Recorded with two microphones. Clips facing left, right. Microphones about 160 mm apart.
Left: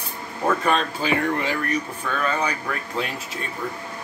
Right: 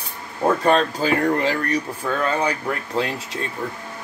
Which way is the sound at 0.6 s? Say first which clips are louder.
Right 4 dB; 35° right (ahead or behind).